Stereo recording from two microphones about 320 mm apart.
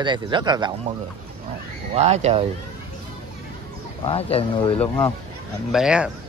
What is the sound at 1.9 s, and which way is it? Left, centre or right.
Speech, right.